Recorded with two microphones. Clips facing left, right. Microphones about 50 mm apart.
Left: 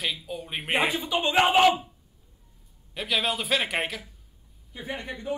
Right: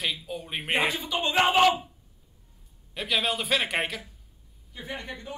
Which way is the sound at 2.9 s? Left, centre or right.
Centre.